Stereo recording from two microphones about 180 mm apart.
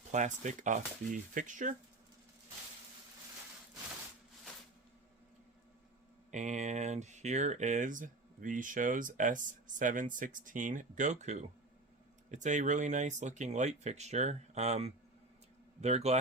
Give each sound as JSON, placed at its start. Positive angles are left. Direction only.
{"t": 0.1, "sound": "speech", "side_deg": -40}
{"t": 6.3, "sound": "speech", "side_deg": -40}